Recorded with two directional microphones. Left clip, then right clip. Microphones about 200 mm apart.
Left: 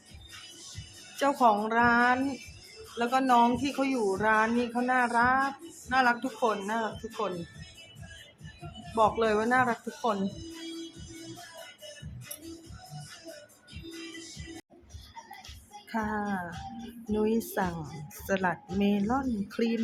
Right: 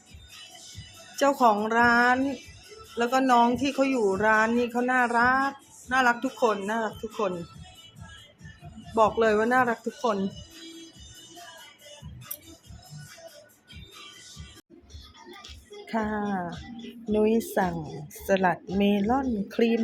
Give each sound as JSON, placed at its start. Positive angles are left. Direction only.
{"t": 1.1, "sound": "speech", "side_deg": -20}
{"t": 9.0, "sound": "speech", "side_deg": -20}
{"t": 15.9, "sound": "speech", "side_deg": -10}